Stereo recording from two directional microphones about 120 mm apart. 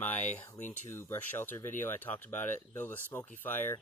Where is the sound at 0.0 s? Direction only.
15° left (ahead or behind).